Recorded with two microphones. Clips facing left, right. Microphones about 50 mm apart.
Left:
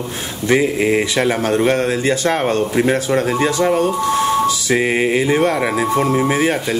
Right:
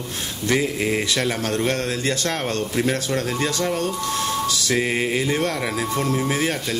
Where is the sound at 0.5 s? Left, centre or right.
Left.